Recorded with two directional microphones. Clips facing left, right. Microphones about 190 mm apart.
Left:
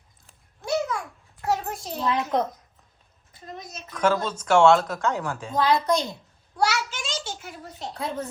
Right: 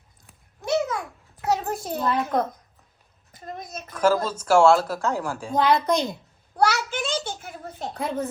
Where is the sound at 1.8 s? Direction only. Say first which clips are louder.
Right 3 dB; 55° right (ahead or behind).